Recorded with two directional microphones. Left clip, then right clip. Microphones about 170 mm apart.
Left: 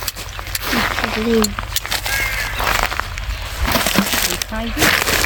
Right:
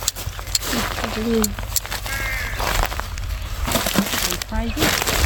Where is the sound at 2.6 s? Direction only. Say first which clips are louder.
Left 6 dB; 5° right (ahead or behind).